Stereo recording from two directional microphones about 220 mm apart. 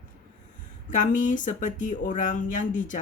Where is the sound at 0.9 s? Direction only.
35° left (ahead or behind).